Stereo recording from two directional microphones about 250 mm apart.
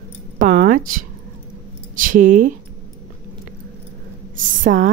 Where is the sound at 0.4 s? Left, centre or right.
Right.